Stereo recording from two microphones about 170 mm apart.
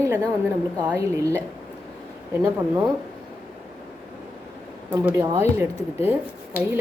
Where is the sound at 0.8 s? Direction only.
20° right (ahead or behind).